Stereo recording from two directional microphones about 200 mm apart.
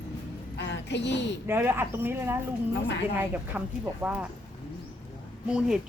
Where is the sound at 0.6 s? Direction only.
60° left (ahead or behind).